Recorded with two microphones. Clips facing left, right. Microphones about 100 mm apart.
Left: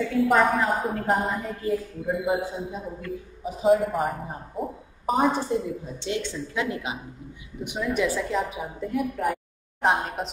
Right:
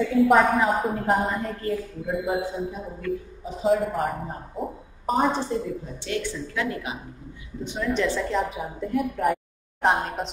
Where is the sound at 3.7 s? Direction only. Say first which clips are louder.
Left 2 dB; centre (ahead or behind).